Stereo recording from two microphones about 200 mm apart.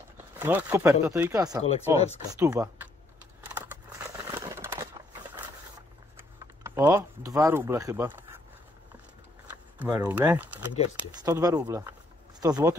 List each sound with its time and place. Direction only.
0.4 s speech: 10° right (ahead or behind)
3.4 s crumpling: 10° right (ahead or behind)
4.3 s coin: 10° right (ahead or behind)
6.1 s speech: 15° right (ahead or behind)
9.9 s speech: 10° right (ahead or behind)